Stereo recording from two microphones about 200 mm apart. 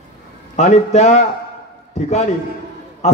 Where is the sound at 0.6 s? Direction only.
35° left (ahead or behind).